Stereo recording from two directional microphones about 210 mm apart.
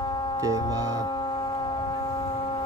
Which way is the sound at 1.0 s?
20° left (ahead or behind).